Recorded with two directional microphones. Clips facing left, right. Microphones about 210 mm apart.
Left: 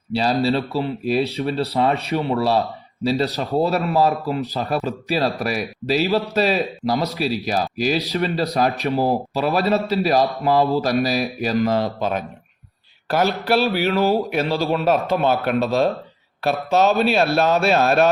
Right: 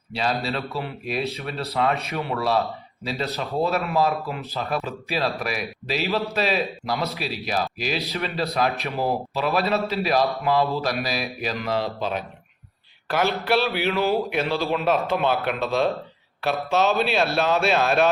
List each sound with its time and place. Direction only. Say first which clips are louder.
0.1 s a man's voice: left 7 dB; 35° left (ahead or behind)